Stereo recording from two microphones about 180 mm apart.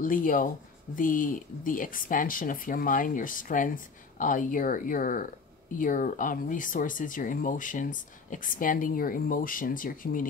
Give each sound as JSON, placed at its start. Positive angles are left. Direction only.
{"t": 0.0, "sound": "speech", "side_deg": 50}